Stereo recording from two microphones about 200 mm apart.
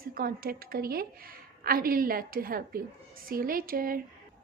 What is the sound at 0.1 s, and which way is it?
A woman's voice, 45° right (ahead or behind).